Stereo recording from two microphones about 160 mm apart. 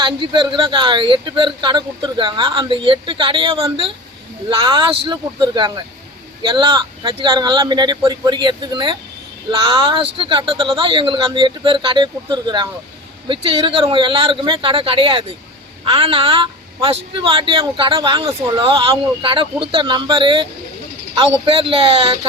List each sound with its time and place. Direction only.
0.0 s a man's voice: 30° right (ahead or behind)